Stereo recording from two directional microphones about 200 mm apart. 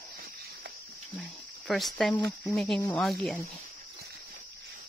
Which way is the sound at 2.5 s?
5° left (ahead or behind).